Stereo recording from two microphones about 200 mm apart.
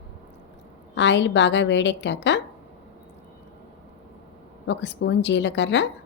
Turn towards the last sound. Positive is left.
turn(degrees=65)  # may be behind; listen again after turning